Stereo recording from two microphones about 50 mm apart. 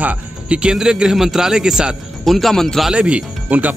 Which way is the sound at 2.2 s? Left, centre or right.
Centre.